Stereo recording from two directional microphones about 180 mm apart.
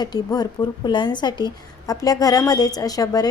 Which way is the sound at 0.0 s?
20° left (ahead or behind).